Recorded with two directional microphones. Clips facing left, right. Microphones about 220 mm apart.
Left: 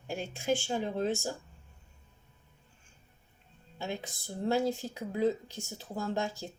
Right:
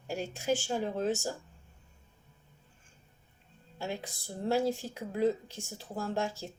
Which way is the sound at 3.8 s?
5° right (ahead or behind).